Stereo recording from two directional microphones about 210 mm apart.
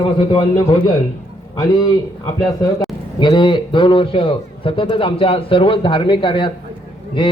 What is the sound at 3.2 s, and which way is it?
A man's voice, 20° left (ahead or behind).